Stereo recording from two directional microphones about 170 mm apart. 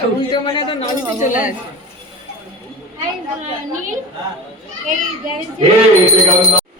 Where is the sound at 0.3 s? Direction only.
30° left (ahead or behind).